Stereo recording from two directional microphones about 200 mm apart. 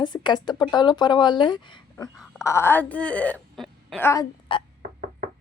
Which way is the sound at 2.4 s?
15° left (ahead or behind).